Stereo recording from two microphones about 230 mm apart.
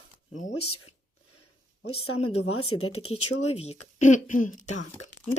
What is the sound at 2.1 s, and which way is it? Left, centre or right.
Speech, left.